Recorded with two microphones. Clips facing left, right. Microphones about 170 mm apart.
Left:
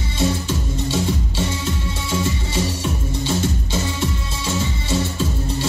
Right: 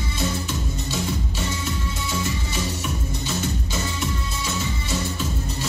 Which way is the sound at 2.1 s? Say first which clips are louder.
Left 6 dB; 30° left (ahead or behind).